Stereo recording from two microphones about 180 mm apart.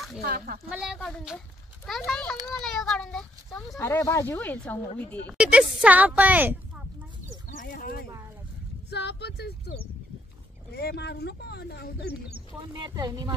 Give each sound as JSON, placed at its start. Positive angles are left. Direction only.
{"t": 0.2, "sound": "speech", "side_deg": -55}
{"t": 0.7, "sound": "speech", "side_deg": -5}
{"t": 3.7, "sound": "speech", "side_deg": 15}
{"t": 5.4, "sound": "speech", "side_deg": -5}
{"t": 7.6, "sound": "speech", "side_deg": 50}
{"t": 8.9, "sound": "speech", "side_deg": 70}
{"t": 10.7, "sound": "speech", "side_deg": 60}
{"t": 12.7, "sound": "speech", "side_deg": -25}